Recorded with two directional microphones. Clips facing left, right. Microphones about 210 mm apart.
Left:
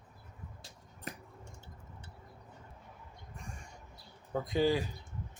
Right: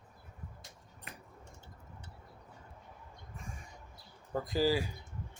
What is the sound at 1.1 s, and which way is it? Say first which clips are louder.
Squish: left 8 dB; 40° left (ahead or behind).